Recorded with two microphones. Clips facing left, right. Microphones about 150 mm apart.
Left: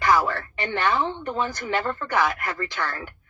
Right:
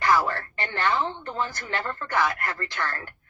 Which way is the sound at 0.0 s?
15° left (ahead or behind).